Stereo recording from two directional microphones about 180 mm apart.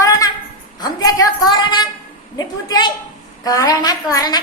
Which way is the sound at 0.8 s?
20° left (ahead or behind).